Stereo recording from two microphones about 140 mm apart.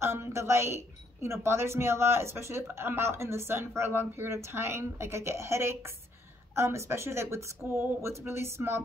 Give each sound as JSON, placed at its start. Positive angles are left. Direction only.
{"t": 0.0, "sound": "a woman's voice", "side_deg": -20}